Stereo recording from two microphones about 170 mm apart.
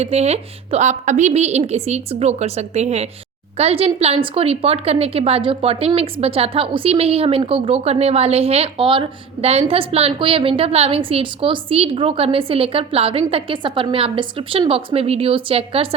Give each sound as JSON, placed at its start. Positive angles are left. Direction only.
{"t": 0.0, "sound": "a woman's voice", "side_deg": -40}